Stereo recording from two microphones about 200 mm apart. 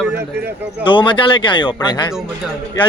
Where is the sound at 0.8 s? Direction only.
25° left (ahead or behind).